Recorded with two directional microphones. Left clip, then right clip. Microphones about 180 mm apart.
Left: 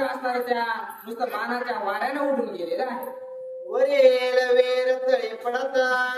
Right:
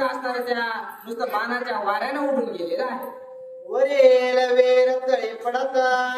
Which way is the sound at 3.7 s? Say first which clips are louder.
Right 2 dB; 20° left (ahead or behind).